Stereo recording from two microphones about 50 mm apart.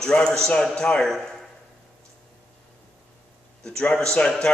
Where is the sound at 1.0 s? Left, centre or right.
Centre.